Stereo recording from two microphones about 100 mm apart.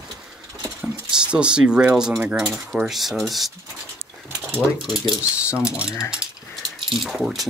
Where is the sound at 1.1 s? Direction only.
10° right (ahead or behind).